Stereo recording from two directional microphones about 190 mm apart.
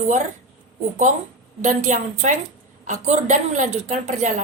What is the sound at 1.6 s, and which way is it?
Speech, 40° right (ahead or behind).